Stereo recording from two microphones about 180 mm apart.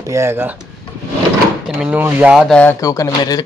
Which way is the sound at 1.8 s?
10° right (ahead or behind).